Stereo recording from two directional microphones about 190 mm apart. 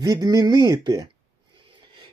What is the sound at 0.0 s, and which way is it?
Speech, 20° right (ahead or behind).